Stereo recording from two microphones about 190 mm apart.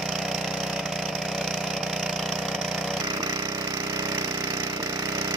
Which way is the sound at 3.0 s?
15° right (ahead or behind).